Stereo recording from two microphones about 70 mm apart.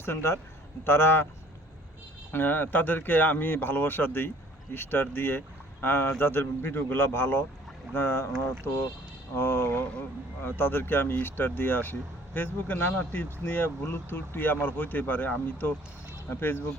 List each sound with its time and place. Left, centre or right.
0.0 s speech: left
2.3 s speech: left
9.3 s speech: left